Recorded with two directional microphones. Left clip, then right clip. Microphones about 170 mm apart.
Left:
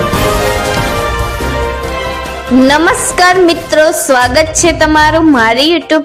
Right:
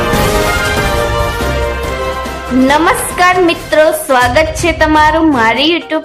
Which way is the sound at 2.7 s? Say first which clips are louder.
Right 1 dB; 35° left (ahead or behind).